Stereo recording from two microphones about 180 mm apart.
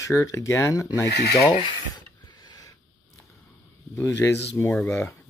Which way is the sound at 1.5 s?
25° left (ahead or behind).